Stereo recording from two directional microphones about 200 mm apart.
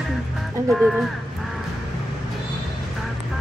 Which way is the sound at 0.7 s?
Centre (ahead or behind).